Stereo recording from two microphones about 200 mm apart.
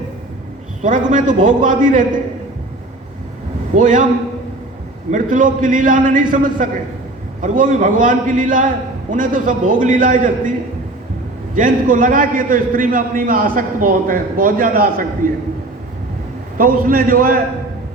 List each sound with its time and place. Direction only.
0.8 s a man's voice: 40° right (ahead or behind)
3.8 s a man's voice: 40° right (ahead or behind)
5.1 s a man's voice: 40° right (ahead or behind)
11.5 s a man's voice: 40° right (ahead or behind)
16.6 s a man's voice: 45° right (ahead or behind)